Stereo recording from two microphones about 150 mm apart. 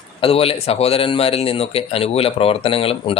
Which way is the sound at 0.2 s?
40° left (ahead or behind).